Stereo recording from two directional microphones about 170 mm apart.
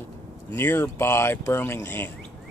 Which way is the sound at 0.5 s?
15° left (ahead or behind).